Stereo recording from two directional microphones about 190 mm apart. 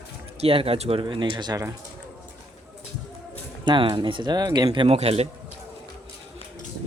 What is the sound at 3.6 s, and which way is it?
Speech, 25° right (ahead or behind).